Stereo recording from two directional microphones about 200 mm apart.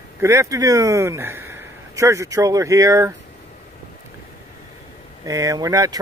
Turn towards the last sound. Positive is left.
turn(degrees=-15)  # may be behind; listen again after turning